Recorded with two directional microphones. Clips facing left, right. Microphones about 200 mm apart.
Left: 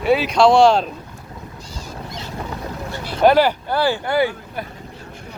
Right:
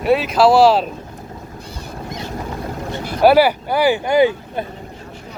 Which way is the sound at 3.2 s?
10° right (ahead or behind).